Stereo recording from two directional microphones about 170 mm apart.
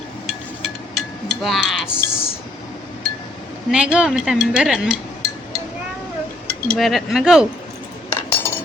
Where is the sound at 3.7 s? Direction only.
5° right (ahead or behind).